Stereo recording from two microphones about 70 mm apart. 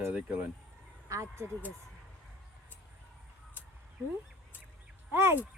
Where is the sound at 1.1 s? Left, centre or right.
Right.